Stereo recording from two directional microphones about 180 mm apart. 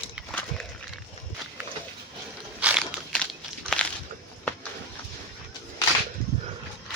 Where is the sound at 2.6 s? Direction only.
5° right (ahead or behind).